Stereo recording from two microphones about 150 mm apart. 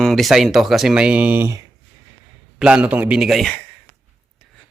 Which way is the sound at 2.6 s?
5° right (ahead or behind).